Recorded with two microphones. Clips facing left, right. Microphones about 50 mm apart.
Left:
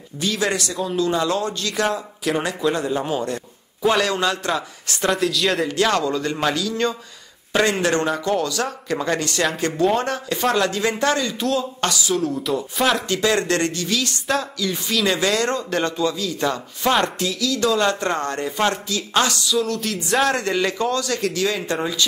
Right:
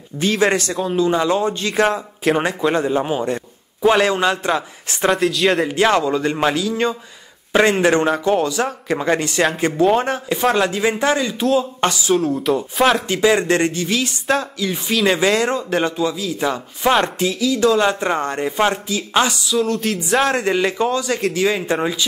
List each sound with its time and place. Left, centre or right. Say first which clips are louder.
0.2 s speech: right 5 dB; right
0.8 s speech: right 3 dB; right
5.1 s speech: right 4 dB; centre
5.7 s speech: right 4 dB; right
10.4 s speech: right 3 dB; centre
12.4 s speech: right 5 dB; centre
13.1 s speech: right 4 dB; centre
14.2 s speech: right 5 dB; centre
14.6 s speech: right 3 dB; centre
19.5 s speech: right 3 dB; centre
20.4 s speech: right 3 dB; centre